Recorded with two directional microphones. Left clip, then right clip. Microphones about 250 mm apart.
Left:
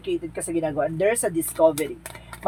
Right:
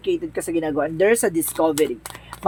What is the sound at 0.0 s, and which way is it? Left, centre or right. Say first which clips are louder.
Speech: right 5 dB; right.